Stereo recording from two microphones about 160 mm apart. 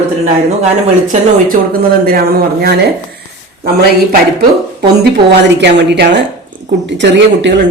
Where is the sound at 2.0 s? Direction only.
70° right (ahead or behind).